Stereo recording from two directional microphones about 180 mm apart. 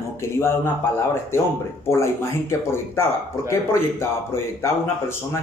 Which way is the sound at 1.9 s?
15° left (ahead or behind).